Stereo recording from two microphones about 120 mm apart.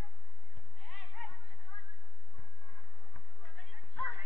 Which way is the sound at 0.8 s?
10° left (ahead or behind).